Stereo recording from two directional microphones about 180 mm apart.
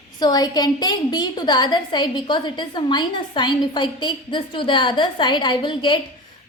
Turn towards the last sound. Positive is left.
turn(degrees=25)  # may be behind; listen again after turning